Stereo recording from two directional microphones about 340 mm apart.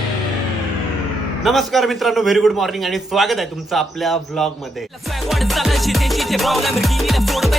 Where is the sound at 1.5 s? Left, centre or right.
Centre.